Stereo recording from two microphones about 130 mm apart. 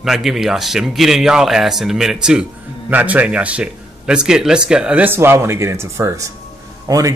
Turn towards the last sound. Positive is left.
turn(degrees=-25)  # may be behind; listen again after turning